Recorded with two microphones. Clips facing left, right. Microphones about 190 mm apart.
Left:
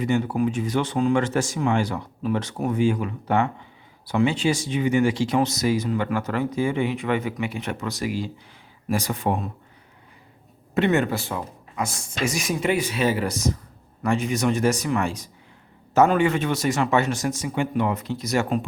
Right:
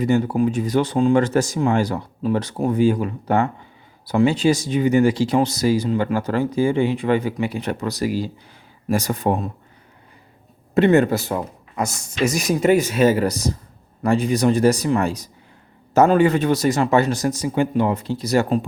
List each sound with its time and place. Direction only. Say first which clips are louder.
0.0 s speech: right 4 dB; 40° right (ahead or behind)
10.8 s speech: right 6 dB; 35° right (ahead or behind)